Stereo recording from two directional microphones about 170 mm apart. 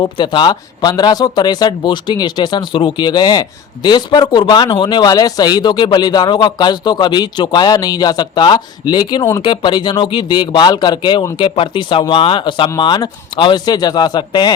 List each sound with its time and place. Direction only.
0.0 s speech: 25° left (ahead or behind)